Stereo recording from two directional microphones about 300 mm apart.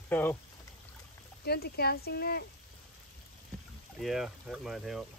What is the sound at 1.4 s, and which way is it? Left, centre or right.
Speech, left.